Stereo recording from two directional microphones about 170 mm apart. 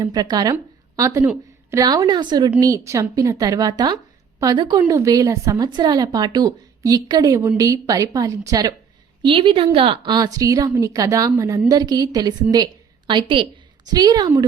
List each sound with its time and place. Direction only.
0.0 s a woman's voice: 25° right (ahead or behind)
0.5 s a sound: 20° right (ahead or behind)
1.7 s a woman's voice: 20° right (ahead or behind)